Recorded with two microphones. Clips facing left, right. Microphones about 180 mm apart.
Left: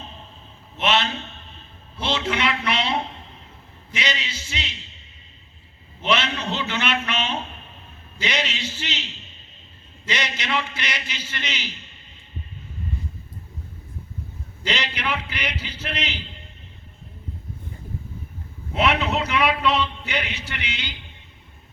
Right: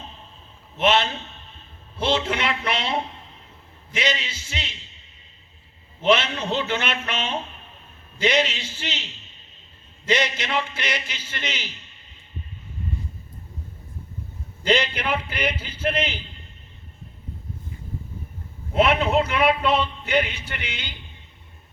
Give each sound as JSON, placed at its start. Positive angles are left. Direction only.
{"t": 0.8, "sound": "a man's voice", "side_deg": -50}
{"t": 3.9, "sound": "a man's voice", "side_deg": -50}
{"t": 6.1, "sound": "a man's voice", "side_deg": -50}
{"t": 10.1, "sound": "a man's voice", "side_deg": -50}
{"t": 14.6, "sound": "a man's voice", "side_deg": -50}
{"t": 18.7, "sound": "a man's voice", "side_deg": -50}